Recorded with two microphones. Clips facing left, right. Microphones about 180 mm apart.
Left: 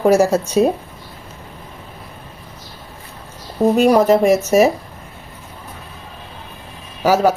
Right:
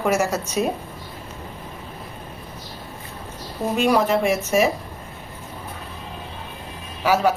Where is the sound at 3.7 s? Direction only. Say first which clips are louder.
Left 5 dB; 40° left (ahead or behind).